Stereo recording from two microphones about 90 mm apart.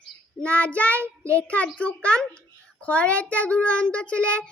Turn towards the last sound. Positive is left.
turn(degrees=15)  # may be behind; listen again after turning